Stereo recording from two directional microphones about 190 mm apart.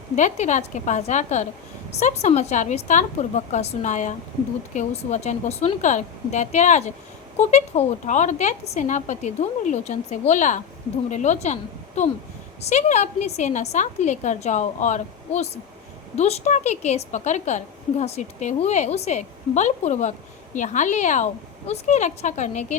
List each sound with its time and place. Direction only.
0.2 s a woman's voice: 40° left (ahead or behind)